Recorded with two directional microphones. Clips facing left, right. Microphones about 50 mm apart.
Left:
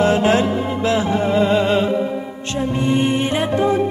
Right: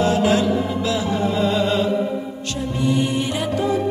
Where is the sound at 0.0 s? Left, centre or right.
Left.